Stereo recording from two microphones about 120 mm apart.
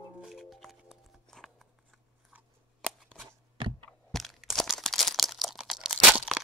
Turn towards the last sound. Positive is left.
turn(degrees=0)  # may be behind; listen again after turning